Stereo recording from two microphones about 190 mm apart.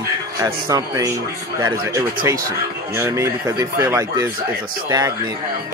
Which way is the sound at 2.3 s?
15° right (ahead or behind).